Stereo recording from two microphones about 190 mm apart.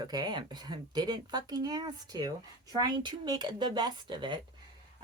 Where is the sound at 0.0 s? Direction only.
20° right (ahead or behind).